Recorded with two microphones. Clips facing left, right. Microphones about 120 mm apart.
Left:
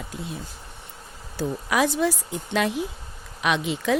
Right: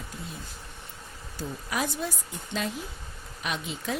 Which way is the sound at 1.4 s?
90° left.